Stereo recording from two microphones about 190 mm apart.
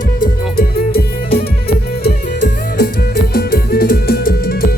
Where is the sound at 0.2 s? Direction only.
50° left (ahead or behind).